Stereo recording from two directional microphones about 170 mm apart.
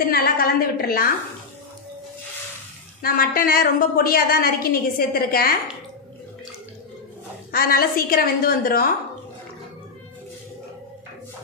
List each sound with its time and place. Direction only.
0.1 s a woman's voice: 60° left (ahead or behind)
3.0 s a woman's voice: 60° left (ahead or behind)
7.5 s a woman's voice: 60° left (ahead or behind)